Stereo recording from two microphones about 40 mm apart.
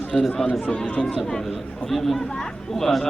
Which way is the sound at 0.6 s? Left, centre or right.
Left.